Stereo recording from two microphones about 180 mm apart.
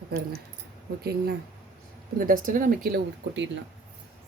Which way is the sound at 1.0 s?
60° right (ahead or behind).